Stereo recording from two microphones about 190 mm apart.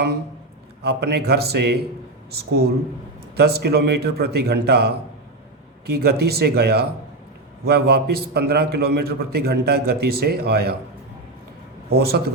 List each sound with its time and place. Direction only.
0.8 s a man's voice: 60° right (ahead or behind)
11.9 s a man's voice: 55° right (ahead or behind)